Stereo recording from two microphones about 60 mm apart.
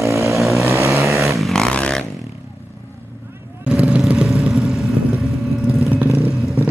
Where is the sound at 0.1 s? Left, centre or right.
Right.